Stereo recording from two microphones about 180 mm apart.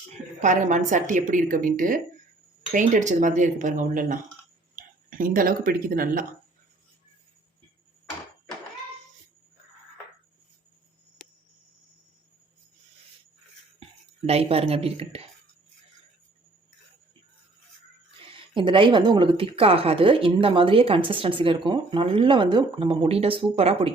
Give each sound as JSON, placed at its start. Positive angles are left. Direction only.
{"t": 0.4, "sound": "a woman's voice", "side_deg": -45}
{"t": 11.2, "sound": "cricket", "side_deg": 0}
{"t": 14.3, "sound": "speech", "side_deg": -35}
{"t": 18.5, "sound": "a woman's voice", "side_deg": -25}